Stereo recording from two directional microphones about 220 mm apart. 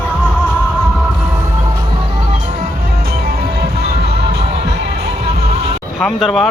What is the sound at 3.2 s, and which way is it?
Music, 45° right (ahead or behind).